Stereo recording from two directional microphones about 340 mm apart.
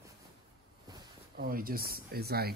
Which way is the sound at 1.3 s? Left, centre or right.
Right.